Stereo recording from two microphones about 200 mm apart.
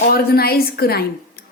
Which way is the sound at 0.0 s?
50° left (ahead or behind).